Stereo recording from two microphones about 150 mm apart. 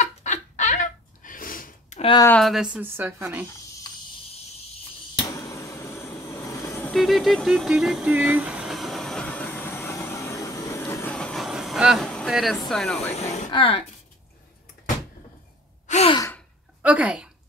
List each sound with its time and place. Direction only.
0.0 s a sound: 50° left (ahead or behind); by 2.0 s 65° left (ahead or behind)
2.4 s a woman's voice: 5° right (ahead or behind)
5.2 s vehicle: 20° left (ahead or behind)
6.9 s vehicle: centre (ahead or behind); by 11.1 s 15° left (ahead or behind)
11.1 s train: centre (ahead or behind)
12.3 s speech: centre (ahead or behind)
13.1 s speech: 45° left (ahead or behind)
15.9 s sigh: 45° left (ahead or behind)
16.8 s a woman's voice: 10° right (ahead or behind)